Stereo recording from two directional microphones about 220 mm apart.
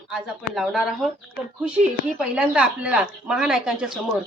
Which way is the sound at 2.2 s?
5° right (ahead or behind).